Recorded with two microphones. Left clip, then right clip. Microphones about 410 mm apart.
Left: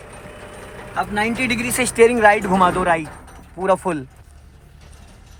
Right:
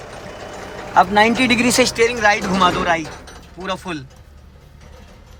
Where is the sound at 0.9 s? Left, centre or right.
Centre.